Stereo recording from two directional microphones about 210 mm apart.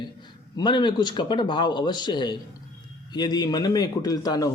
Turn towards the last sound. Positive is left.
turn(degrees=15)  # may be behind; listen again after turning